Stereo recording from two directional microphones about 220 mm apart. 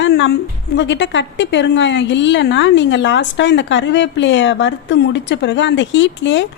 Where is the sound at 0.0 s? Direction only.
50° left (ahead or behind).